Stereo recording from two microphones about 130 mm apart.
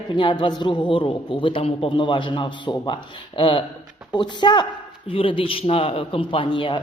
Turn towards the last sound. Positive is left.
turn(degrees=40)  # may be behind; listen again after turning